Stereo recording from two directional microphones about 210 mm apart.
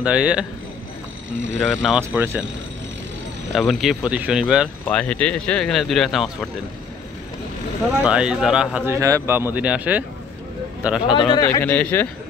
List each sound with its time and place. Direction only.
0.0 s speech: 5° right (ahead or behind)
1.6 s speech: centre (ahead or behind)
3.5 s speech: centre (ahead or behind)
8.0 s speech: 5° right (ahead or behind)
11.1 s speech: 20° left (ahead or behind)
11.6 s speech: 5° left (ahead or behind)